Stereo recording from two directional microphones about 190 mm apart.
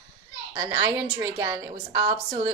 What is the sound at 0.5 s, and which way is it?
A woman's voice, 20° right (ahead or behind).